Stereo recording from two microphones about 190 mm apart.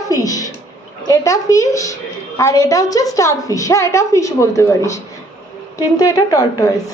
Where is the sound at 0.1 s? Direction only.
20° left (ahead or behind).